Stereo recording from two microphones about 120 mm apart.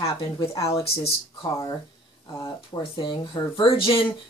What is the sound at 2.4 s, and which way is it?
Speech, 45° left (ahead or behind).